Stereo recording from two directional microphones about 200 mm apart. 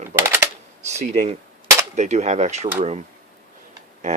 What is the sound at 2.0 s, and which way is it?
Speech, 35° right (ahead or behind).